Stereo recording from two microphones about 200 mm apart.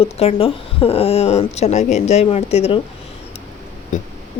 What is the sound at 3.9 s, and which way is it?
Speech, 40° left (ahead or behind).